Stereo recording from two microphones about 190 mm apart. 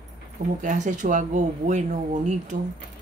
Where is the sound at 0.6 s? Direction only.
40° right (ahead or behind).